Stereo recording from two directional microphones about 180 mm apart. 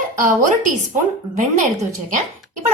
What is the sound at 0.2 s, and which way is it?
Speech, 45° right (ahead or behind).